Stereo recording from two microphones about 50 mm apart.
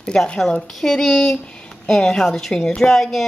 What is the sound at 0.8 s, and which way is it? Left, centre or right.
A woman's voice, centre.